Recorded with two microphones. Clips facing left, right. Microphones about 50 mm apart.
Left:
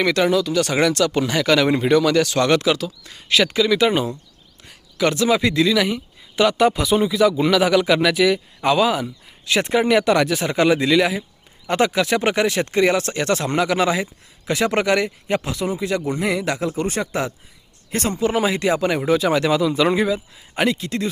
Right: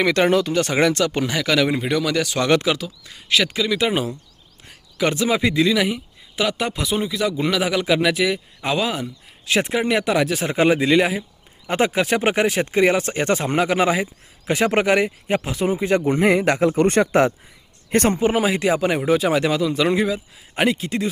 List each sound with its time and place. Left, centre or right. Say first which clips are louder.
0.3 s speech: even; right
1.3 s speech: left 2 dB; centre
4.9 s speech: left 2 dB; centre
10.5 s speech: right 1 dB; centre; by 16.6 s right
16.6 s speech: right 6 dB; right
18.3 s speech: even; centre